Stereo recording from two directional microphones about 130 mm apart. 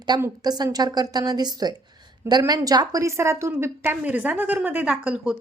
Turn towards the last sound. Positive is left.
turn(degrees=-10)  # may be behind; listen again after turning